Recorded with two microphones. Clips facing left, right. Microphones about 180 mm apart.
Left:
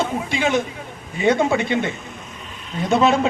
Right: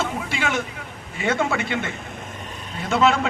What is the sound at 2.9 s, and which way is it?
Speech, 20° left (ahead or behind).